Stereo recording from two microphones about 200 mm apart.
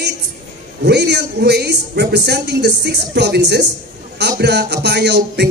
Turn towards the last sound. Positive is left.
turn(degrees=-55)  # may be behind; listen again after turning